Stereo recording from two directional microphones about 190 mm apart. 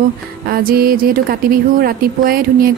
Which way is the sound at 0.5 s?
50° right (ahead or behind).